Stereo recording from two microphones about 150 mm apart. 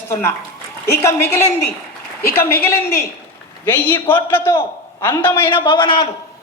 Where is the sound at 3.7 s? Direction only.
10° left (ahead or behind).